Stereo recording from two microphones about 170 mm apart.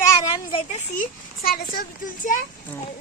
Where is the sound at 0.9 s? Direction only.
55° left (ahead or behind).